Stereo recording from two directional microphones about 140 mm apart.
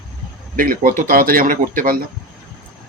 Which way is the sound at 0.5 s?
90° right.